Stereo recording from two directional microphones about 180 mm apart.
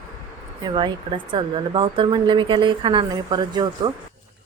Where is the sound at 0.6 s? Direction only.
25° right (ahead or behind).